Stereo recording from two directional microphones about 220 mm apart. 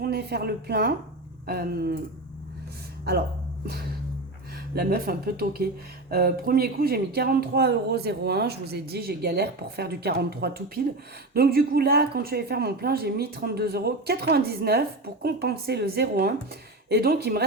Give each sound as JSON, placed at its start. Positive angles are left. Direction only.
{"t": 0.0, "sound": "a woman's voice", "side_deg": -45}
{"t": 3.0, "sound": "speech", "side_deg": -45}
{"t": 4.7, "sound": "a woman's voice", "side_deg": -45}